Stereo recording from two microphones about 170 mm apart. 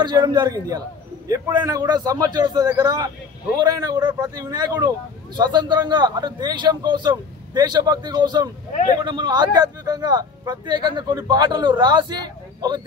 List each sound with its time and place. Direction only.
0.0 s a man's voice: 25° right (ahead or behind)